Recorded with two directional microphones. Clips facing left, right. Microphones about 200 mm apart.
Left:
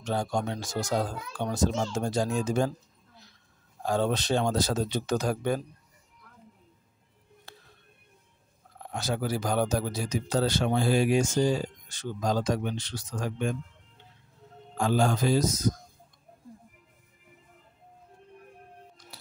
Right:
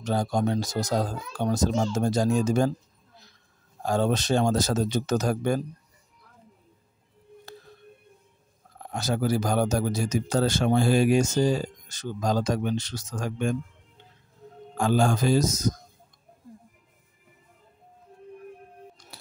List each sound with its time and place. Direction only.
0.0 s a child's voice: 40° right (ahead or behind)
3.8 s speech: 45° right (ahead or behind)
8.8 s speech: 40° right (ahead or behind)
14.8 s speech: 50° right (ahead or behind)